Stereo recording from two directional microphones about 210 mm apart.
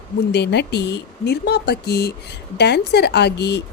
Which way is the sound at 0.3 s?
55° left (ahead or behind).